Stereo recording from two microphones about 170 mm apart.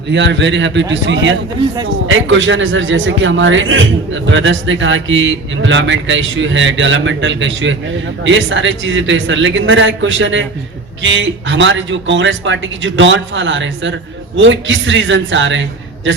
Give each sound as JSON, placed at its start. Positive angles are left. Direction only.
{"t": 0.1, "sound": "a man's voice", "side_deg": -90}